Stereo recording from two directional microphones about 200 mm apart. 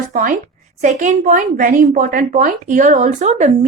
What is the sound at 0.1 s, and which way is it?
A woman's voice, 40° right (ahead or behind).